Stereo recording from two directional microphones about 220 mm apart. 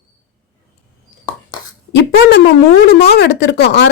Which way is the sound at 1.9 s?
45° left (ahead or behind).